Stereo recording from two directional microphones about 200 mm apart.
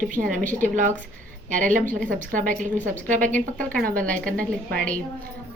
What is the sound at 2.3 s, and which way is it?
Speech, 40° right (ahead or behind).